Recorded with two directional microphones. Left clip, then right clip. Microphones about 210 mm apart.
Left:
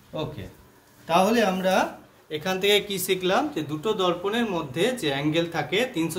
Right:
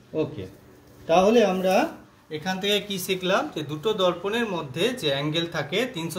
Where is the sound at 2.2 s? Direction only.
35° left (ahead or behind).